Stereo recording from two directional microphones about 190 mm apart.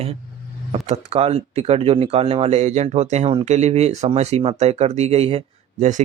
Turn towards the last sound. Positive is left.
turn(degrees=-40)  # may be behind; listen again after turning